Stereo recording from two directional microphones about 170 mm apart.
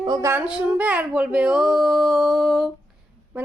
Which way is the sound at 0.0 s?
20° right (ahead or behind).